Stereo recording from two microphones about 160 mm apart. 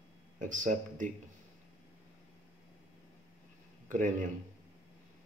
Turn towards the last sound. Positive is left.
turn(degrees=-55)  # may be behind; listen again after turning